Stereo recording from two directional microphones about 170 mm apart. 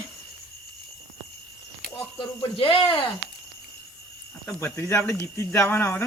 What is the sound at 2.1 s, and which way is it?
Speech, 30° left (ahead or behind).